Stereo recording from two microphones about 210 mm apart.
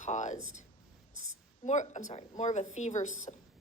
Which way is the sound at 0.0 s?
35° left (ahead or behind).